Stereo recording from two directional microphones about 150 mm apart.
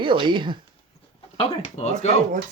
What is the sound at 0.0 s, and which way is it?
Speech, 35° right (ahead or behind).